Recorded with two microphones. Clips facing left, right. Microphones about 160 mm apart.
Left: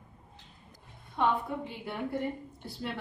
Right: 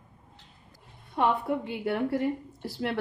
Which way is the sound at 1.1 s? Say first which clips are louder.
Right 3 dB; 75° right (ahead or behind).